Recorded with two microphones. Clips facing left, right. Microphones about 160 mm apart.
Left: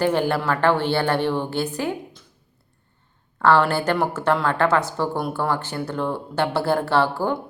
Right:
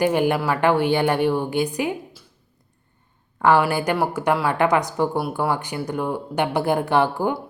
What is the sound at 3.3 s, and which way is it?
Speech, 15° right (ahead or behind).